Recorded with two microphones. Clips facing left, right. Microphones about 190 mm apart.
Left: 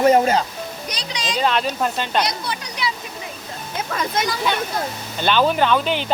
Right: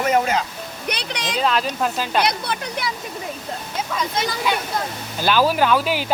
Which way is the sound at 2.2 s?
55° right (ahead or behind).